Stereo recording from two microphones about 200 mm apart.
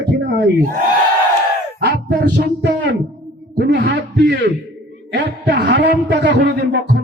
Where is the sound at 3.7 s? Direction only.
60° right (ahead or behind).